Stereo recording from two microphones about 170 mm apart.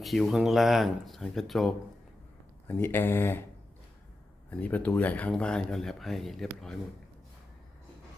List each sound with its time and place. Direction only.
0.0 s speech: centre (ahead or behind)
2.6 s speech: 10° left (ahead or behind)
4.5 s speech: 10° left (ahead or behind)